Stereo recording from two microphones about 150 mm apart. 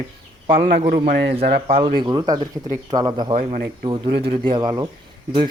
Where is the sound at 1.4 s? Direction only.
90° right.